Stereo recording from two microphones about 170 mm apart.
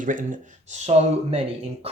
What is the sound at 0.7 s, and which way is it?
Speech, 40° right (ahead or behind).